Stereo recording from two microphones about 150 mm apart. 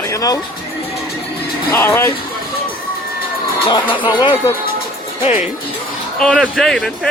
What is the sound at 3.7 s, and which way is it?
Speech, 35° left (ahead or behind).